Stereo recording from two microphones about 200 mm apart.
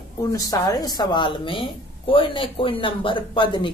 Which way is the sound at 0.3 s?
20° left (ahead or behind).